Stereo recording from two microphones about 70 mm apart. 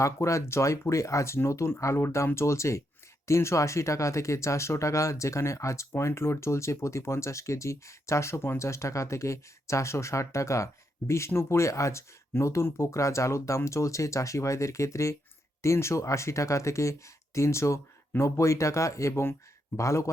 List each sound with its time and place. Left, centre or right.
0.0 s speech: left